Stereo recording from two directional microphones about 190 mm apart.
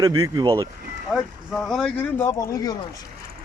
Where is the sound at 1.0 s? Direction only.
5° right (ahead or behind); by 2.7 s 20° left (ahead or behind).